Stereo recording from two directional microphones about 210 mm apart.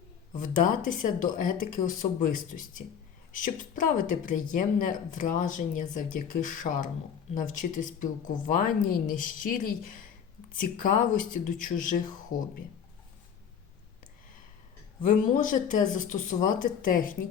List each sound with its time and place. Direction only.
0.3 s speech: 40° left (ahead or behind)
15.0 s speech: 40° left (ahead or behind)